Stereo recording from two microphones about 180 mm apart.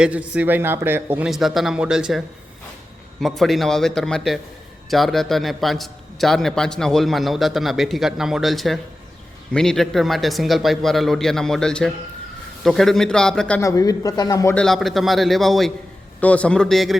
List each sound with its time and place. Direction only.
0.0 s a man's voice: 10° right (ahead or behind)
1.3 s a man's voice: centre (ahead or behind)
13.6 s a man's voice: 20° left (ahead or behind)
14.5 s a man's voice: centre (ahead or behind)